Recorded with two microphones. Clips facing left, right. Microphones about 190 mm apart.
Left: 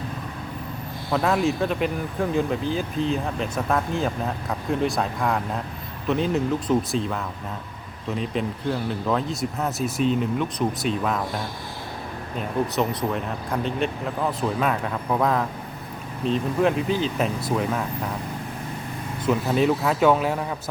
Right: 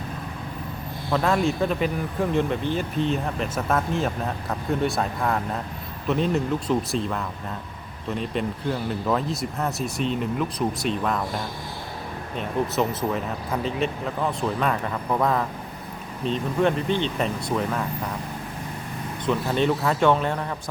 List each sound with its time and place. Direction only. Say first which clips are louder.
1.1 s speech: even; centre (ahead or behind)
12.4 s speech: even; centre (ahead or behind)
19.2 s speech: left 2 dB; 5° left (ahead or behind)